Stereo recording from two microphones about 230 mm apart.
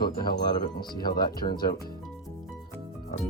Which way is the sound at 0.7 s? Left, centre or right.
Centre.